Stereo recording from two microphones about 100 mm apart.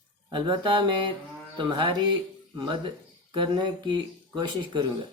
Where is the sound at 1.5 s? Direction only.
55° right (ahead or behind).